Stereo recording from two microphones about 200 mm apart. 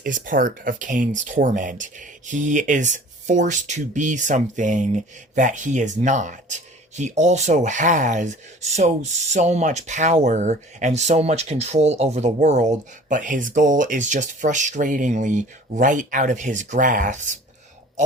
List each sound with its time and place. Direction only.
0.0 s speech: 45° right (ahead or behind)